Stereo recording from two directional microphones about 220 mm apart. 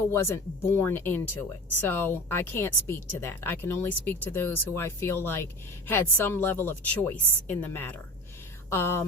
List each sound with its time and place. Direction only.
0.1 s speech: 10° left (ahead or behind)